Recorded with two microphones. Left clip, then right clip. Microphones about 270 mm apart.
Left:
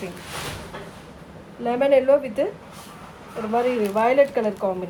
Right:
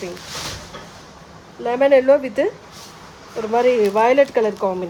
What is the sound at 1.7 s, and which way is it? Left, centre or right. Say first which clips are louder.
Speech: right 4 dB; right.